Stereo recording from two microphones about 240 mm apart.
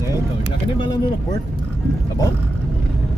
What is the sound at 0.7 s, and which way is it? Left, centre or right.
Speech, centre.